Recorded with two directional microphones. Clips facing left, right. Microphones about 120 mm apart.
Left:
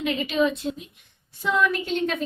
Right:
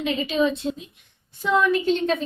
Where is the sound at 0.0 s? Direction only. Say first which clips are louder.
Right 1 dB; 25° right (ahead or behind).